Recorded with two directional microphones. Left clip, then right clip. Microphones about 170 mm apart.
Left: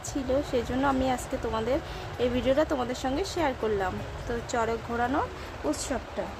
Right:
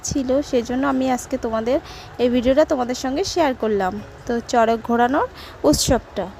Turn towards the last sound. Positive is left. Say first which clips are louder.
# right 13 dB
turn(degrees=-50)  # may be behind; listen again after turning